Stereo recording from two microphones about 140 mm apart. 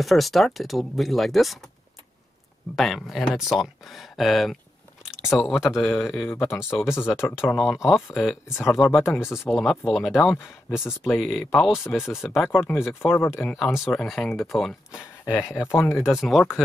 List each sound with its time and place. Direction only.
0.0 s speech: centre (ahead or behind)
2.7 s speech: centre (ahead or behind)
6.2 s speech: 15° left (ahead or behind)
6.6 s speech: 5° right (ahead or behind)
9.0 s speech: 15° left (ahead or behind)
9.3 s speech: centre (ahead or behind)
13.1 s speech: 15° left (ahead or behind)
13.5 s speech: centre (ahead or behind)